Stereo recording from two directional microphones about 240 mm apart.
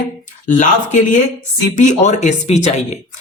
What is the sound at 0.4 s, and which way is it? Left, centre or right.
Speech, left.